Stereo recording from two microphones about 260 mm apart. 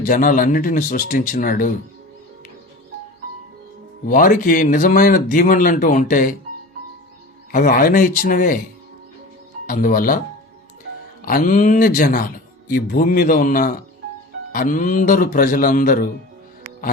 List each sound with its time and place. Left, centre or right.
0.0 s speech: left
4.1 s speech: left
7.5 s speech: left
9.6 s speech: left
11.2 s speech: left